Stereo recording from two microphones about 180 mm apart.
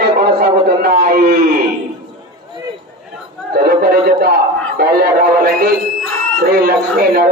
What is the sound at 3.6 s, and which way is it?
A man's voice, 60° right (ahead or behind).